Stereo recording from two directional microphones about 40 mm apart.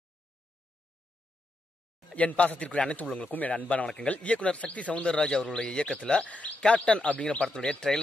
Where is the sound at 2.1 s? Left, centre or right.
Left.